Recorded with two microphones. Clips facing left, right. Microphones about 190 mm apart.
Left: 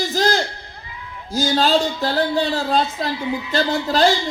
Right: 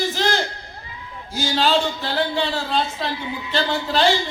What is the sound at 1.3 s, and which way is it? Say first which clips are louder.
A man's voice: left 3 dB; 40° left (ahead or behind).